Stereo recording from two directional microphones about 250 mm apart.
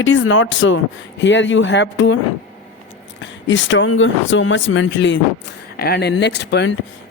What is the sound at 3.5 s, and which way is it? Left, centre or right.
Speech, left.